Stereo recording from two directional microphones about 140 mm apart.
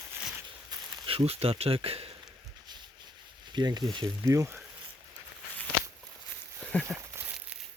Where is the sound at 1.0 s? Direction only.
45° right (ahead or behind).